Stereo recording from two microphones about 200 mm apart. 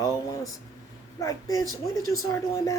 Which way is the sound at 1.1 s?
15° left (ahead or behind).